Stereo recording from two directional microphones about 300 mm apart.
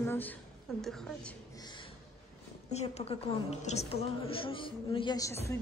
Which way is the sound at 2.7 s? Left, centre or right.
Left.